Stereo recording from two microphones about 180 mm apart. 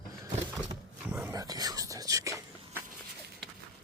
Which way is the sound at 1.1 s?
10° right (ahead or behind).